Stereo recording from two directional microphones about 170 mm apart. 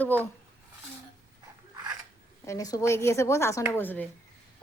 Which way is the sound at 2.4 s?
20° left (ahead or behind).